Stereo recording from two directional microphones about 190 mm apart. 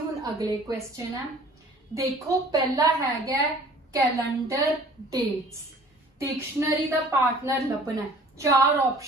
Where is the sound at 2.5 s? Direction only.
20° right (ahead or behind).